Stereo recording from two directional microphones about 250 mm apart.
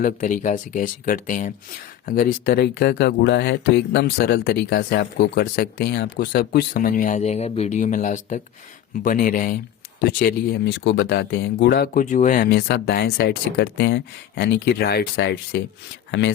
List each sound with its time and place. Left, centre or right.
0.0 s speech: left